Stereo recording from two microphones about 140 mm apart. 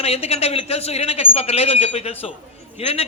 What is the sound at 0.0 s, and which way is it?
Speech, 45° left (ahead or behind).